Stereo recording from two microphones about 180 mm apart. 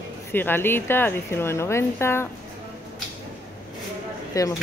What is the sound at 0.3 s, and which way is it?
Speech, 10° left (ahead or behind).